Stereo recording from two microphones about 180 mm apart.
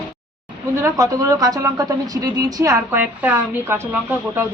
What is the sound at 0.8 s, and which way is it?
A woman's voice, 20° right (ahead or behind).